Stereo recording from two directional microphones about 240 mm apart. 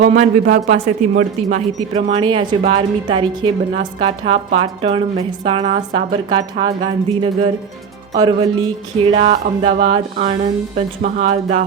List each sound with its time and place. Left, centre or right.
0.0 s a woman's voice: right